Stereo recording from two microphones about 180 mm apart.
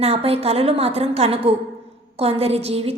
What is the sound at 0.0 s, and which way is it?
A woman's voice, 35° right (ahead or behind).